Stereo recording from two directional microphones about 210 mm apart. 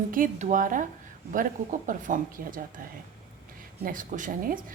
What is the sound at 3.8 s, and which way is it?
Speech, 40° right (ahead or behind).